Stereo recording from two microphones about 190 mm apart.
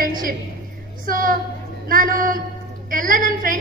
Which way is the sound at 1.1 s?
45° right (ahead or behind).